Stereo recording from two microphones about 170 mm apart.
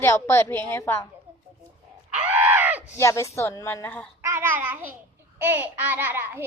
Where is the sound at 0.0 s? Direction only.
15° left (ahead or behind).